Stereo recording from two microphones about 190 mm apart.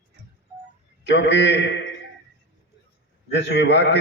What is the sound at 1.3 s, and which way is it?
Speech, 70° left (ahead or behind).